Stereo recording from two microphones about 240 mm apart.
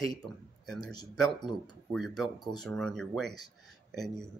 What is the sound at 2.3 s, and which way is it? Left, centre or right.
Speech, centre.